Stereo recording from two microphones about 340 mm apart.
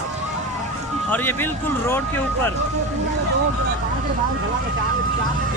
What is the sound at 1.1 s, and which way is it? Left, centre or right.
Speech, centre.